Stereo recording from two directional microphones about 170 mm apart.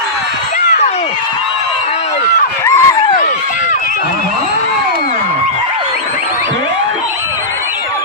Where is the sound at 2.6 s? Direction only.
15° left (ahead or behind).